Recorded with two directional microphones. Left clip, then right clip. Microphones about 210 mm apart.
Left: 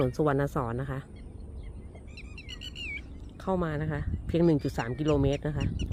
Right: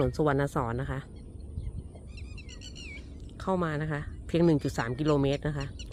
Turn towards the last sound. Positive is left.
turn(degrees=10)  # may be behind; listen again after turning